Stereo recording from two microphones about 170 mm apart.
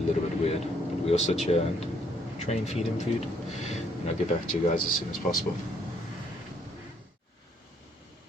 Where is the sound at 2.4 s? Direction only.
40° left (ahead or behind).